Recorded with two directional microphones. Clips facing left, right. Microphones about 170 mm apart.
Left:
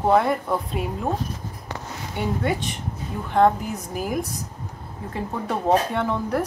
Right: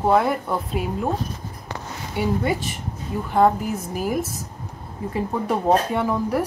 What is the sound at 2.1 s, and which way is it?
A woman's voice, 5° right (ahead or behind).